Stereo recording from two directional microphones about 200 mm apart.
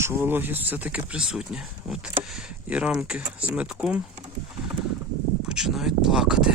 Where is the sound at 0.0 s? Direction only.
10° right (ahead or behind).